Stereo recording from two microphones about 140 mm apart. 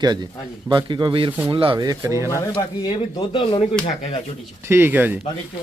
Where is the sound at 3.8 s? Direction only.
50° left (ahead or behind).